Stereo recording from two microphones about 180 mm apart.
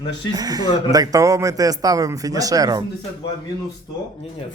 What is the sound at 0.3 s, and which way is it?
Speech, 20° right (ahead or behind).